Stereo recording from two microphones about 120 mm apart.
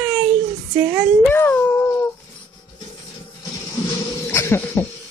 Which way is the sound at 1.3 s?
15° left (ahead or behind).